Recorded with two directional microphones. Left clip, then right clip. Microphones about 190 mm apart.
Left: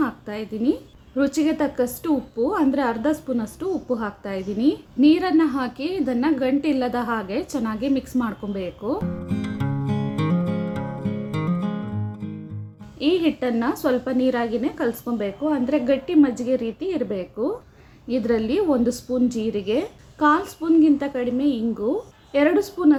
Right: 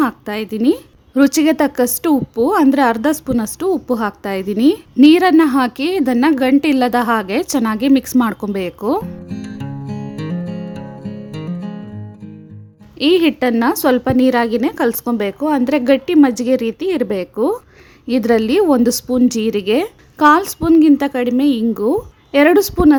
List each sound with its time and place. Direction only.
0.0 s a woman's voice: 65° right (ahead or behind)
13.0 s a woman's voice: 65° right (ahead or behind)